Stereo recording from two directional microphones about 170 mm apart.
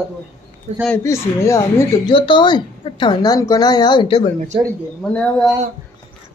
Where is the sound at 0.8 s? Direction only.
15° left (ahead or behind).